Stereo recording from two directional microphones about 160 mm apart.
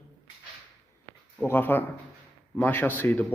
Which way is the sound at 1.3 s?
15° left (ahead or behind).